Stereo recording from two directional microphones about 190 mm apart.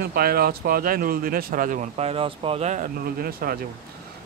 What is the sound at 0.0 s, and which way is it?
Speech, 55° right (ahead or behind).